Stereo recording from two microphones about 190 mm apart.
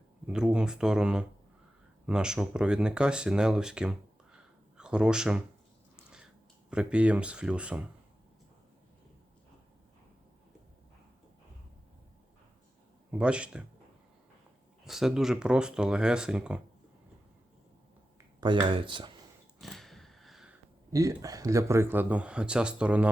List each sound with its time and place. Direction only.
0.3 s speech: 5° right (ahead or behind)
6.7 s speech: 5° right (ahead or behind)
13.1 s speech: 5° right (ahead or behind)
14.8 s speech: centre (ahead or behind)
18.3 s speech: 25° right (ahead or behind)
19.5 s a sound: centre (ahead or behind)
20.9 s speech: 15° right (ahead or behind)